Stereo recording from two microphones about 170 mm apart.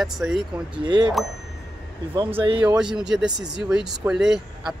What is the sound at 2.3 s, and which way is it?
Speech, 30° right (ahead or behind).